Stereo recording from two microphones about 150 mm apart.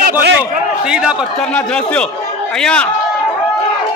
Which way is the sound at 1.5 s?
10° left (ahead or behind).